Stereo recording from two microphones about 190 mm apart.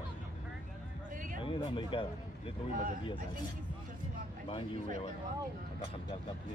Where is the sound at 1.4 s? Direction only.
25° left (ahead or behind).